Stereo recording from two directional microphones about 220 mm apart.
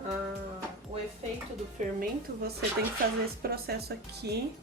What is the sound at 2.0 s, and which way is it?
Speech, 45° right (ahead or behind).